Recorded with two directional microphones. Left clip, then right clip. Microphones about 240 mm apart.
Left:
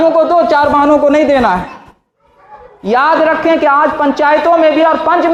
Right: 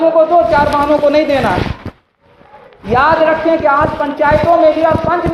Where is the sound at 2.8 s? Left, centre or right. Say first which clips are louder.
Left 1 dB; left.